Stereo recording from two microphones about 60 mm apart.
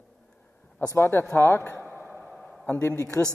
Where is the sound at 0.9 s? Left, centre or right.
Left.